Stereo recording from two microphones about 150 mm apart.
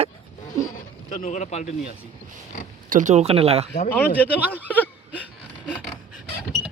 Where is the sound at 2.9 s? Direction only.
55° right (ahead or behind).